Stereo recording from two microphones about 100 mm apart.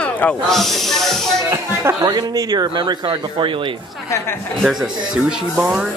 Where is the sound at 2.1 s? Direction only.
45° right (ahead or behind); by 3.7 s 60° right (ahead or behind).